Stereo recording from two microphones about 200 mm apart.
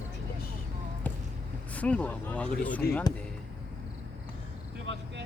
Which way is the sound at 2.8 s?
50° left (ahead or behind).